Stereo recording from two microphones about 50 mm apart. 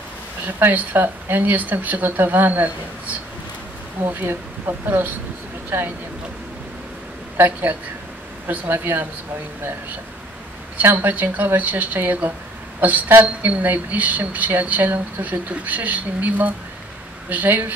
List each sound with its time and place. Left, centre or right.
0.6 s a woman's voice: right
4.0 s a woman's voice: right
7.3 s a woman's voice: right
10.8 s a woman's voice: right